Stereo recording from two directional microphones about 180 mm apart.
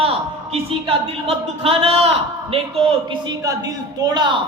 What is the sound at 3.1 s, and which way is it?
A woman's voice, 20° right (ahead or behind).